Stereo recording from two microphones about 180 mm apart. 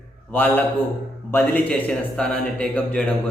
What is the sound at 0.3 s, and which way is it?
A man's voice, 10° left (ahead or behind).